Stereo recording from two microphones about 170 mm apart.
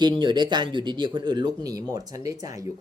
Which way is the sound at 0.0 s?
25° right (ahead or behind).